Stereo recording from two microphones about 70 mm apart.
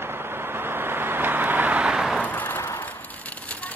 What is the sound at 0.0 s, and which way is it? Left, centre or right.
Vehicle, right.